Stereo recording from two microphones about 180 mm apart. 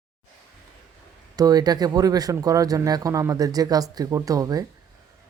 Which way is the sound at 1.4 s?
20° right (ahead or behind).